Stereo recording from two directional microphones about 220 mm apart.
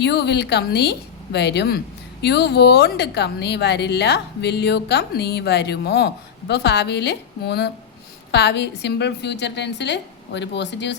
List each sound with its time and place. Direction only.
0.0 s speech: 50° left (ahead or behind)